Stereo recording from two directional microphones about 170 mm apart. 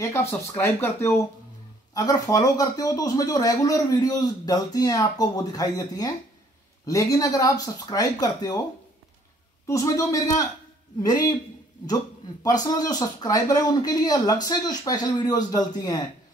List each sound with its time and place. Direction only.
0.0 s speech: 15° left (ahead or behind)
9.7 s speech: 15° left (ahead or behind)
12.4 s speech: 20° left (ahead or behind)